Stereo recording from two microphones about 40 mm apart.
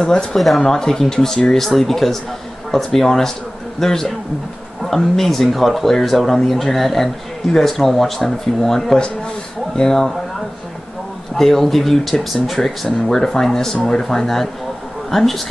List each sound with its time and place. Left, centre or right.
0.0 s speech: centre
0.4 s speech: centre
0.7 s speech: centre
11.3 s speech: centre